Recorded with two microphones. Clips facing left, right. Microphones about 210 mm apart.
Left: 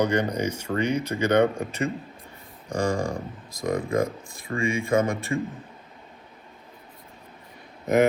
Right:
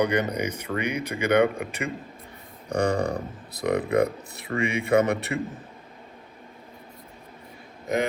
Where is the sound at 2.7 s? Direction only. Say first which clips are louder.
Right 2 dB; 60° right (ahead or behind).